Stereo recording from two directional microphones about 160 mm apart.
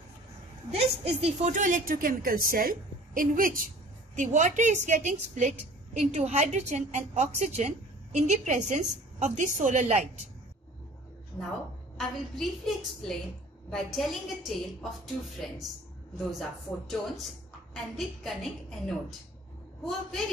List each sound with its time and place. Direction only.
1.0 s a woman's voice: 40° right (ahead or behind)
1.5 s a woman's voice: 55° right (ahead or behind)
12.0 s a woman's voice: centre (ahead or behind)
16.3 s a woman's voice: centre (ahead or behind)